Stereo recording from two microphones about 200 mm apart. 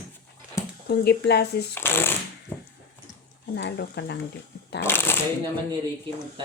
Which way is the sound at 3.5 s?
60° left (ahead or behind).